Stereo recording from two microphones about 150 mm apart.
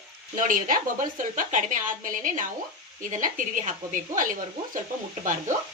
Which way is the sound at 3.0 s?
60° right (ahead or behind).